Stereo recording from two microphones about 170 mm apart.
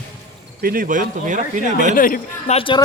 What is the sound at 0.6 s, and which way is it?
Speech, 55° right (ahead or behind).